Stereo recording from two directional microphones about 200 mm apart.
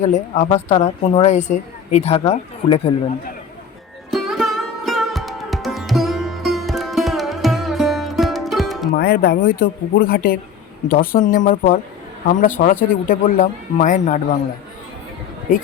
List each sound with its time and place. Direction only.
0.0 s a woman's voice: 35° left (ahead or behind)
4.1 s music: centre (ahead or behind)
9.0 s a woman's voice: 50° left (ahead or behind)